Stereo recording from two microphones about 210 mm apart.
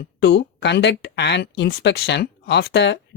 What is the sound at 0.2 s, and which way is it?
Speech, 55° left (ahead or behind).